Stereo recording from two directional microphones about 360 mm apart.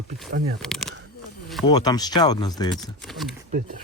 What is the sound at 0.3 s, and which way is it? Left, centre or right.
Speech, right.